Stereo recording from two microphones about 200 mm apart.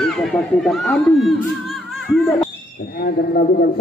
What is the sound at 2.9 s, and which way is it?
Speech, 50° left (ahead or behind).